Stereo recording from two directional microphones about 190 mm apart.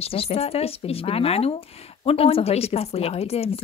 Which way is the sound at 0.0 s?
30° left (ahead or behind).